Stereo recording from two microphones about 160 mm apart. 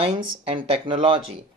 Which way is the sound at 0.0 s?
35° right (ahead or behind).